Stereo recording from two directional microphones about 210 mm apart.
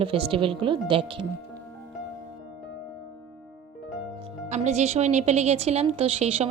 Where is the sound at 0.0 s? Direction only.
25° right (ahead or behind).